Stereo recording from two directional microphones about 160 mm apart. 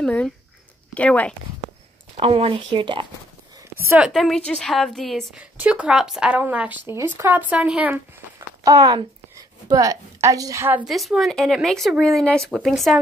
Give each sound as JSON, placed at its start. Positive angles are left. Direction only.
{"t": 0.0, "sound": "speech", "side_deg": 5}
{"t": 2.1, "sound": "speech", "side_deg": -40}
{"t": 3.8, "sound": "speech", "side_deg": -10}
{"t": 4.1, "sound": "a woman's voice", "side_deg": 0}
{"t": 5.4, "sound": "a woman's voice", "side_deg": -10}
{"t": 10.9, "sound": "a woman's voice", "side_deg": 0}